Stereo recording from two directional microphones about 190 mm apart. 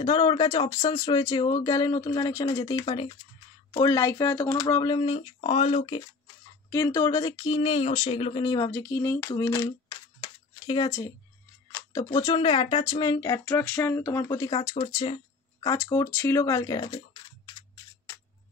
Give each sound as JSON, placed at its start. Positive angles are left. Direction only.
{"t": 0.0, "sound": "speech", "side_deg": 25}
{"t": 6.7, "sound": "speech", "side_deg": 20}
{"t": 15.6, "sound": "speech", "side_deg": 20}